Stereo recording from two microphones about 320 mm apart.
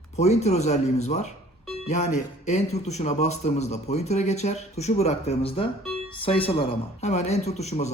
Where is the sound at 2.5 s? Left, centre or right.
Left.